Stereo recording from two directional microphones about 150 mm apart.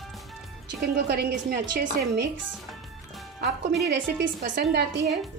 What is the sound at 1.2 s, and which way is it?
Speech, 90° right.